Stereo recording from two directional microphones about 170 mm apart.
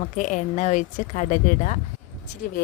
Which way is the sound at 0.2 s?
45° left (ahead or behind).